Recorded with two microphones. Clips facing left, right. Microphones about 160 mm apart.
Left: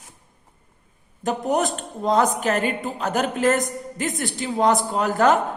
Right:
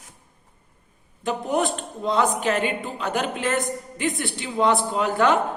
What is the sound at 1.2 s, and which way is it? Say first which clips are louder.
A woman's voice: left 1 dB; 40° left (ahead or behind).